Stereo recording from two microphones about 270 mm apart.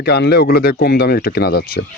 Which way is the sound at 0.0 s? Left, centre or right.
Left.